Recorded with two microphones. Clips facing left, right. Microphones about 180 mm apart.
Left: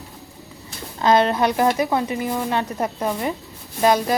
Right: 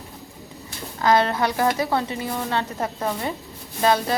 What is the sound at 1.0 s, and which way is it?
A woman's voice, 20° left (ahead or behind).